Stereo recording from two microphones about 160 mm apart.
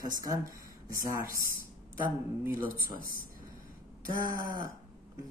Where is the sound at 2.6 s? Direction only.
65° left (ahead or behind).